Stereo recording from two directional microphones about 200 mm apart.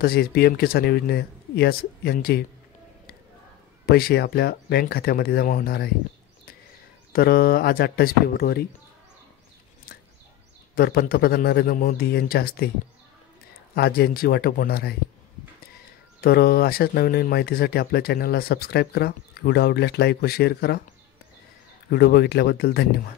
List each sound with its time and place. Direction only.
0.0 s speech: 50° left (ahead or behind)
3.8 s speech: 50° left (ahead or behind)
7.1 s speech: 50° left (ahead or behind)
10.7 s speech: 50° left (ahead or behind)
13.7 s speech: 50° left (ahead or behind)
16.2 s speech: 50° left (ahead or behind)
21.8 s speech: 55° left (ahead or behind)